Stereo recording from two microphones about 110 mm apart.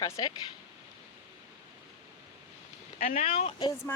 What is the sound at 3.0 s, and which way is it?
Speech, 75° left (ahead or behind).